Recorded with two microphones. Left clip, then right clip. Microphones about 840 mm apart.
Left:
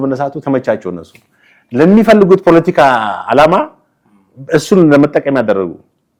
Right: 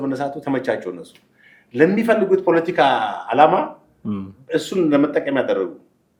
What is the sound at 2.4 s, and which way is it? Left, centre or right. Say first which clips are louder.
Speech: left 8 dB; left.